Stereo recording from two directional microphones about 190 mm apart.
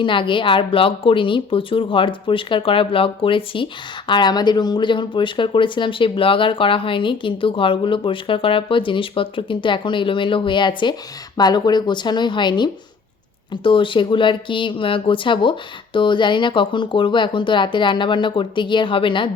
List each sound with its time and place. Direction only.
0.0 s speech: 25° left (ahead or behind)